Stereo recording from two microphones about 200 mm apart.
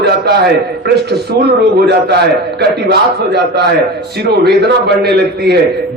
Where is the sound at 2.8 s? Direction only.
55° right (ahead or behind).